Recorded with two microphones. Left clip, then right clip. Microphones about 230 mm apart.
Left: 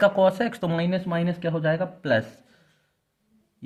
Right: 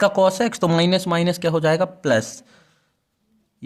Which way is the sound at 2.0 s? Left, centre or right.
Right.